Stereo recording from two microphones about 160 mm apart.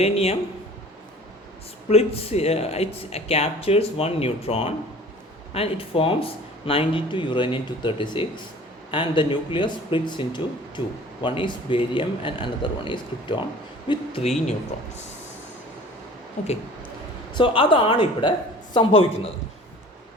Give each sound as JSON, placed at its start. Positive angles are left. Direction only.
{"t": 0.0, "sound": "speech", "side_deg": 40}
{"t": 1.9, "sound": "speech", "side_deg": 40}
{"t": 17.3, "sound": "speech", "side_deg": 30}